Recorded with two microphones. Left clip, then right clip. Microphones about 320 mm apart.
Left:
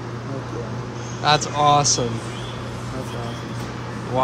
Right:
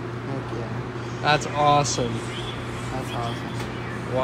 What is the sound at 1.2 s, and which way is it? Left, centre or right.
Speech, centre.